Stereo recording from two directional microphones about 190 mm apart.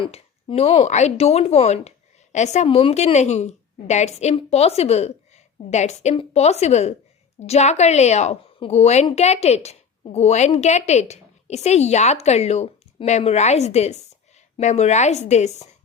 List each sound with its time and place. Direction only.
0.0 s a woman's voice: 30° left (ahead or behind)